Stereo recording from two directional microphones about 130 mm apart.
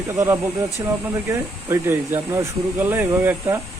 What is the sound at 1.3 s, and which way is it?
Speech, 20° right (ahead or behind).